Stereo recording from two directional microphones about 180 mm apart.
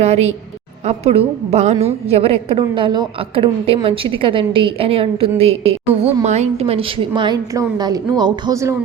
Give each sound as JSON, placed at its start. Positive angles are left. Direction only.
{"t": 0.0, "sound": "a woman's voice", "side_deg": -35}